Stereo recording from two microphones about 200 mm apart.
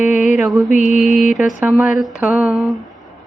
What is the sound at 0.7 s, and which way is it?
Mantra, 40° left (ahead or behind).